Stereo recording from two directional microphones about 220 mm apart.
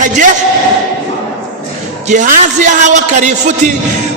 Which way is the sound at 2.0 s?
35° right (ahead or behind).